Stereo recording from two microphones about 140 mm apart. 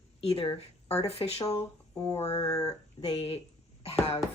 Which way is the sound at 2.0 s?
20° left (ahead or behind).